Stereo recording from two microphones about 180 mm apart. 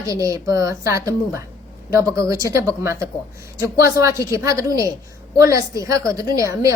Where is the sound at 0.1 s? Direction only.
20° right (ahead or behind).